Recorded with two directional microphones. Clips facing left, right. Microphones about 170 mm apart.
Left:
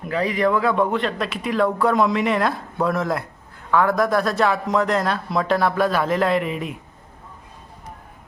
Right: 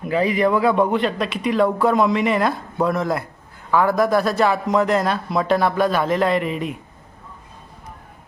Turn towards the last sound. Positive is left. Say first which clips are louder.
# right 1 dB
turn(degrees=0)  # may be behind; listen again after turning